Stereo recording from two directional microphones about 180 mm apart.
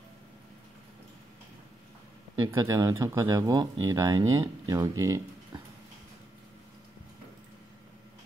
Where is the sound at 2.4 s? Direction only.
15° right (ahead or behind).